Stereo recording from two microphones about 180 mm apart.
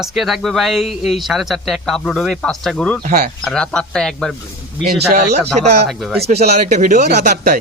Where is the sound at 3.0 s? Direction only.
50° right (ahead or behind).